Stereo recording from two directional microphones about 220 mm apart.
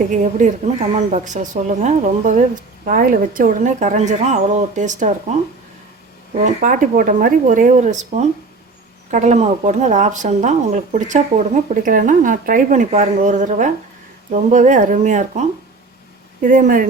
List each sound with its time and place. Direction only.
0.3 s speech: 30° right (ahead or behind)
6.3 s speech: 35° right (ahead or behind)